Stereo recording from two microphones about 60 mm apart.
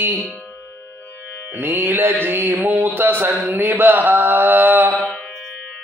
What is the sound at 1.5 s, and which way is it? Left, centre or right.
Mantra, right.